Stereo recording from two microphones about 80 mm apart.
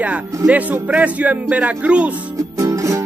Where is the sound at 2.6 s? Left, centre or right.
Right.